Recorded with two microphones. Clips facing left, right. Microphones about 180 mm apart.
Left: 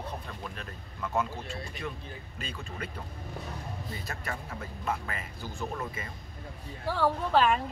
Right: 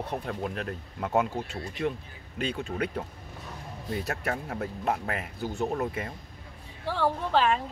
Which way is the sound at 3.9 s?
70° right (ahead or behind).